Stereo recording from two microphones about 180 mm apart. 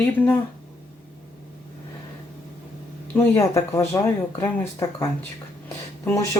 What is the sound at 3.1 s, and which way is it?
Speech, 15° left (ahead or behind).